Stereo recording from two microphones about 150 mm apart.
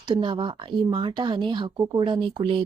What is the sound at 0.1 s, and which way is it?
Speech, 30° right (ahead or behind).